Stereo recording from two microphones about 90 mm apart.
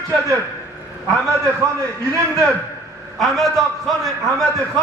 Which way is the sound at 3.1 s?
Centre (ahead or behind).